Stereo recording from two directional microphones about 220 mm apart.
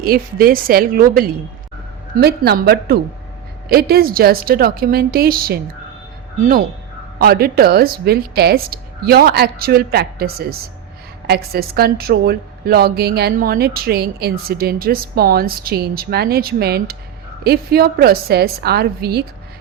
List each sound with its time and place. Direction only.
0.0 s a woman's voice: 40° right (ahead or behind)